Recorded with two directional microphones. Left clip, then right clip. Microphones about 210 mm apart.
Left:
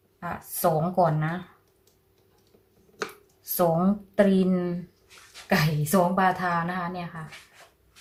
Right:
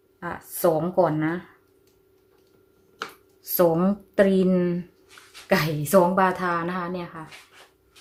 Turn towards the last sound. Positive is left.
turn(degrees=-45)  # may be behind; listen again after turning